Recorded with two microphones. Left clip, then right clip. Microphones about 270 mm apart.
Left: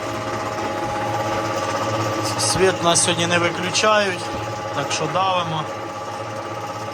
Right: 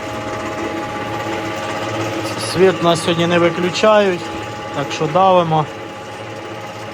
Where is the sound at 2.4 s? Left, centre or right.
Centre.